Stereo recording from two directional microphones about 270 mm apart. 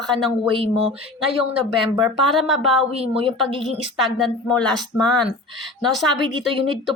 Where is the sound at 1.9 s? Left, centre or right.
Centre.